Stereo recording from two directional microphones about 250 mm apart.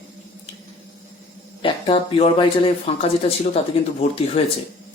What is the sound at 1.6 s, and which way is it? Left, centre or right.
Speech, left.